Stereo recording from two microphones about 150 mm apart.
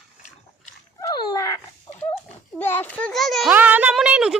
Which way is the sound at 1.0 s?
25° left (ahead or behind).